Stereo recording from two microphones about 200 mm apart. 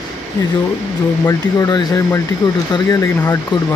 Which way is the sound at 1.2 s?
20° left (ahead or behind).